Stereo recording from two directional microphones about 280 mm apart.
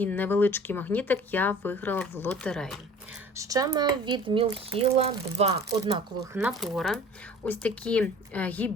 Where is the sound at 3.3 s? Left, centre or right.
Centre.